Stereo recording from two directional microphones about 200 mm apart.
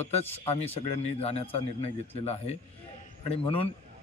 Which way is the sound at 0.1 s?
30° left (ahead or behind).